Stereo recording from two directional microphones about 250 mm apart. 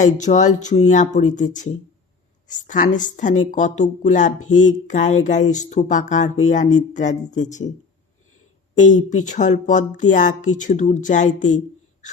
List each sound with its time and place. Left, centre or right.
0.0 s speech: left
8.8 s speech: left